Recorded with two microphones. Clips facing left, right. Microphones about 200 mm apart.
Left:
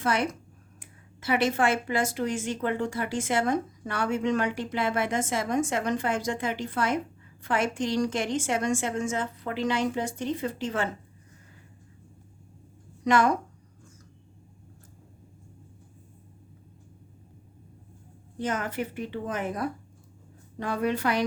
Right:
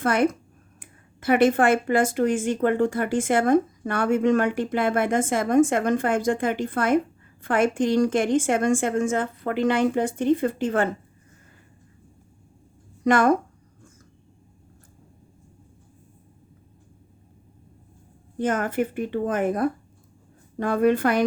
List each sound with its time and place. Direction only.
0.0 s speech: 55° right (ahead or behind)
13.1 s speech: 50° right (ahead or behind)
18.3 s speech: 50° right (ahead or behind)